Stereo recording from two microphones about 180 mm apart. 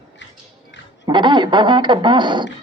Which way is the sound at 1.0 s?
25° right (ahead or behind).